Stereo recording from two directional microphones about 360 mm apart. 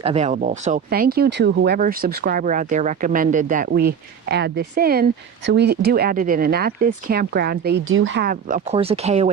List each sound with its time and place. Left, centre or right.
0.0 s speech: centre